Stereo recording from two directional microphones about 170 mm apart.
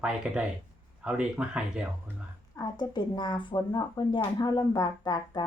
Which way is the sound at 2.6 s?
25° left (ahead or behind).